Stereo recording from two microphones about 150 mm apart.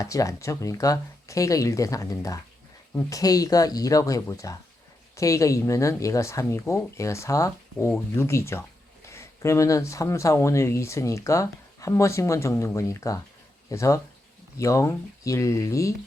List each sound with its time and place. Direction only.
0.0 s speech: 20° left (ahead or behind)